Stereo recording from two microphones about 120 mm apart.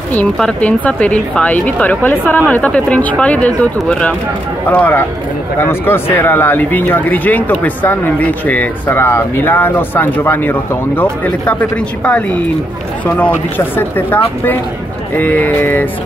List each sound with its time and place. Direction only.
0.1 s speech: 10° left (ahead or behind)
4.6 s speech: 15° left (ahead or behind)